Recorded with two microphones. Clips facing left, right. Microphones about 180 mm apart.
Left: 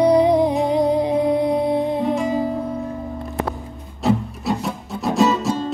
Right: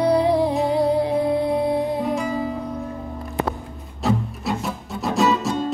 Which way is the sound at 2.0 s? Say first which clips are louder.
Left 3 dB; centre (ahead or behind).